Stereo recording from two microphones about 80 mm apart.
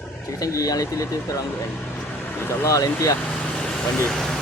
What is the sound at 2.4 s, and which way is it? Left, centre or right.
Speech, left.